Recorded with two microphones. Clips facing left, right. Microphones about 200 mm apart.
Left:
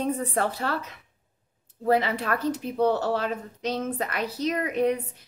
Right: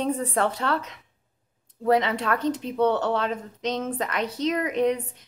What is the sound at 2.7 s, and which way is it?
Speech, 35° left (ahead or behind).